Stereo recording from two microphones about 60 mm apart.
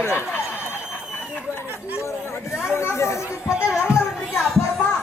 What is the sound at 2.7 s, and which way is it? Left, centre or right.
Chatter, left.